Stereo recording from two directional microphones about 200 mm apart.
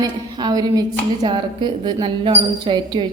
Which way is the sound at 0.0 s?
20° right (ahead or behind).